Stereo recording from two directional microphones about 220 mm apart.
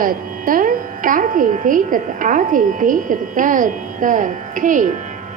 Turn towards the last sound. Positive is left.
turn(degrees=-35)  # may be behind; listen again after turning